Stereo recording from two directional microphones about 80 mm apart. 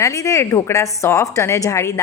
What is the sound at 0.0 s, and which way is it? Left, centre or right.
A woman's voice, left.